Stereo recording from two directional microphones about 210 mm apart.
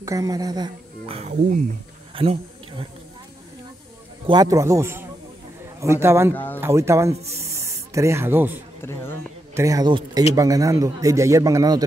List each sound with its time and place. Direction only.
0.0 s a woman's voice: 15° right (ahead or behind)
4.3 s a man's voice: 15° right (ahead or behind)
6.3 s speech: 10° left (ahead or behind)
6.6 s a man's voice: 15° right (ahead or behind)